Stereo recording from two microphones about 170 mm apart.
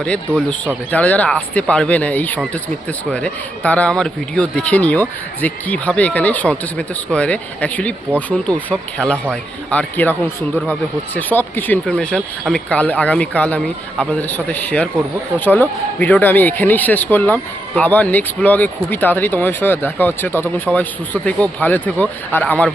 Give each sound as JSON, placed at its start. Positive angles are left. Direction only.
{"t": 0.0, "sound": "speech", "side_deg": 5}